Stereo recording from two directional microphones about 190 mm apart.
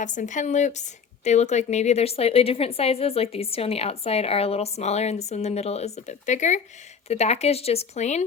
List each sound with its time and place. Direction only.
0.0 s speech: 40° left (ahead or behind)